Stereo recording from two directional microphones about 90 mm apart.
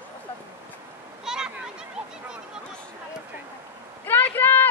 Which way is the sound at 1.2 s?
5° right (ahead or behind).